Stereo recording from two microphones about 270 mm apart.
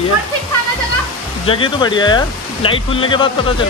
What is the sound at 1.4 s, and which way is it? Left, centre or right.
Speech, centre.